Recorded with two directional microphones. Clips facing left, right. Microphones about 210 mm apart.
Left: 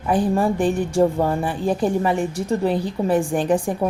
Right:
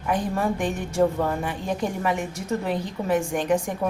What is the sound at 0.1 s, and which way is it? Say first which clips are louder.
A woman's voice: left 5 dB; 30° left (ahead or behind).